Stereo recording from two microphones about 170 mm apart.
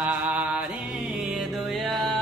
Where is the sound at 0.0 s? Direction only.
10° right (ahead or behind).